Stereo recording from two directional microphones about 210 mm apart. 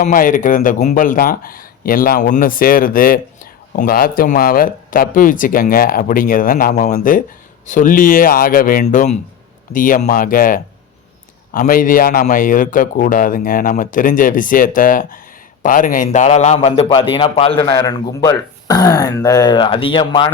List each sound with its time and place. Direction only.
0.0 s a man's voice: 40° left (ahead or behind); by 20.3 s 25° left (ahead or behind)